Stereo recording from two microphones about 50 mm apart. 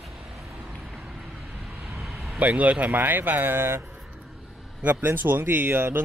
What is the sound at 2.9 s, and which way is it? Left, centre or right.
Speech, right.